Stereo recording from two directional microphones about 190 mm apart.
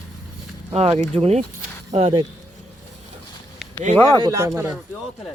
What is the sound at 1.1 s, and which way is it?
Speech, 30° right (ahead or behind).